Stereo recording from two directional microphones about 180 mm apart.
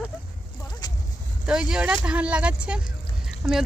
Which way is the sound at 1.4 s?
5° right (ahead or behind).